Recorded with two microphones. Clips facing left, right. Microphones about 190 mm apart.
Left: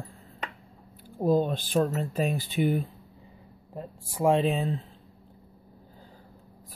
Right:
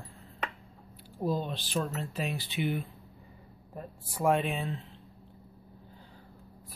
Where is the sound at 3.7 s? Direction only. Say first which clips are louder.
Left 4 dB; 25° left (ahead or behind).